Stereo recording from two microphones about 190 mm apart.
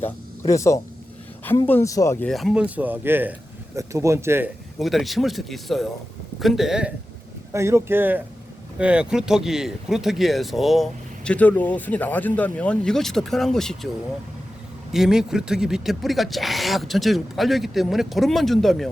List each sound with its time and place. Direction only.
0.0 s speech: 15° left (ahead or behind); by 4.5 s 10° right (ahead or behind)
4.8 s speech: centre (ahead or behind)
7.5 s speech: 15° right (ahead or behind); by 13.7 s centre (ahead or behind)
14.9 s speech: 5° right (ahead or behind)